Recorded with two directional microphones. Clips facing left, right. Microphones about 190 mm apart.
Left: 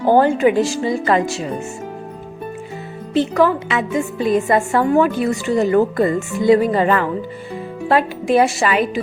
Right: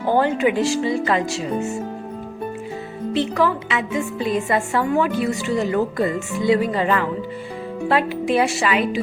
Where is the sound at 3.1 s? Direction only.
45° left (ahead or behind).